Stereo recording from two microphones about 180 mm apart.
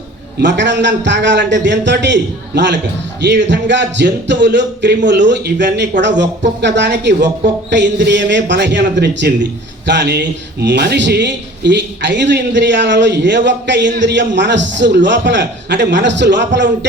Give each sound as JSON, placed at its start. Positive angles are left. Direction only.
{"t": 0.3, "sound": "speech", "side_deg": -75}